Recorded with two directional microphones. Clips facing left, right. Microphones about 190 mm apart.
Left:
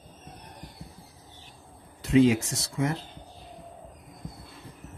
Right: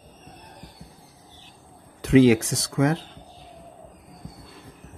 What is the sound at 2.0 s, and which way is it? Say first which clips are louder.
Speech: right 5 dB; 90° right.